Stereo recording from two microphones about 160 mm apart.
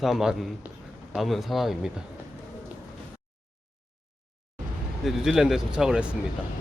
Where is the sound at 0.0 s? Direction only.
Centre (ahead or behind).